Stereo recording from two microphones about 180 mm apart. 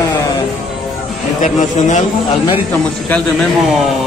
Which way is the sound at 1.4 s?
45° left (ahead or behind).